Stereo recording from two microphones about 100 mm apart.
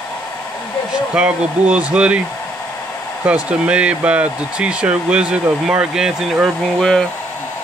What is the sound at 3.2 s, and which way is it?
Speech, 15° right (ahead or behind).